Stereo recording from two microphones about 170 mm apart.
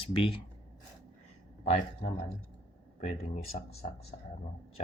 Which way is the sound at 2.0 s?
40° left (ahead or behind).